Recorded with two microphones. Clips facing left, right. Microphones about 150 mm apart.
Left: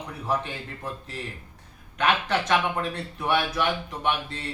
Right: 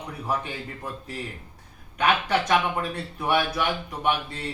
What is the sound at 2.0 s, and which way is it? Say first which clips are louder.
A man's voice: right 1 dB; 10° right (ahead or behind).